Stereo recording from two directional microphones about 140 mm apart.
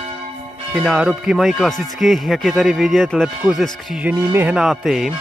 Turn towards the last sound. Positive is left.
turn(degrees=0)  # may be behind; listen again after turning